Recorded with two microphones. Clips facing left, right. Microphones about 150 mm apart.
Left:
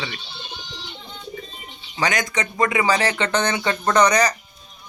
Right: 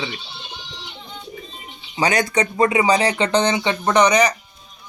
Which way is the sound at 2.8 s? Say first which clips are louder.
Right 3 dB; 15° right (ahead or behind).